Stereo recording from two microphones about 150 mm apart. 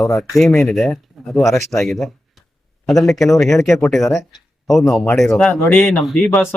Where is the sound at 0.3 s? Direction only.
Centre (ahead or behind).